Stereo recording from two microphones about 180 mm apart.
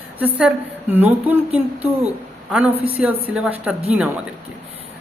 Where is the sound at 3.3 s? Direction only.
5° right (ahead or behind).